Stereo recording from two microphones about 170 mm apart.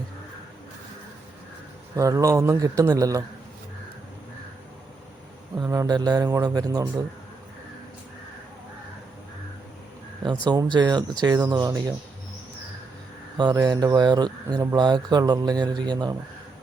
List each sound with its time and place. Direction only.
2.0 s speech: 20° right (ahead or behind)
5.5 s speech: 20° right (ahead or behind)
10.5 s speech: 25° right (ahead or behind)
13.3 s speech: 25° right (ahead or behind)